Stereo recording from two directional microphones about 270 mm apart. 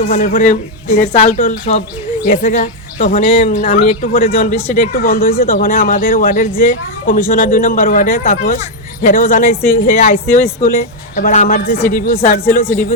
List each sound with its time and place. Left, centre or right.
0.3 s speech: left